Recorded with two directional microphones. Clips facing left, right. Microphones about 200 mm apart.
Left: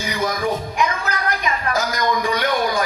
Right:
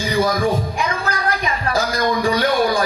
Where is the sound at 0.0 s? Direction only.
30° right (ahead or behind).